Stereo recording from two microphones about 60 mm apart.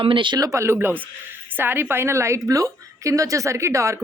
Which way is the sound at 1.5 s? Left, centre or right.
Right.